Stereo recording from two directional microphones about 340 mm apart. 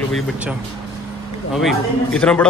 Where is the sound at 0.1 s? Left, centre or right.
Centre.